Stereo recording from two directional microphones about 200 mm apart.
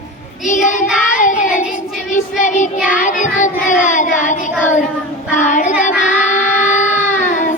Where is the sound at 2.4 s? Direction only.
40° left (ahead or behind).